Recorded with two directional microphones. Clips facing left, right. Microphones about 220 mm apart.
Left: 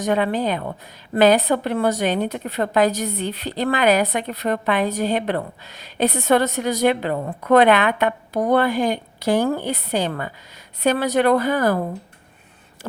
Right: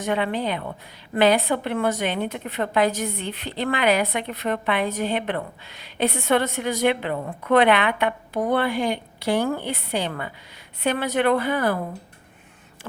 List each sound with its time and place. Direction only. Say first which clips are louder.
0.0 s a woman's voice: left 4 dB; 40° left (ahead or behind)